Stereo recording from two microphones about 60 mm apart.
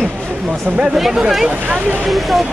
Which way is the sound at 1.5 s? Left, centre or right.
Right.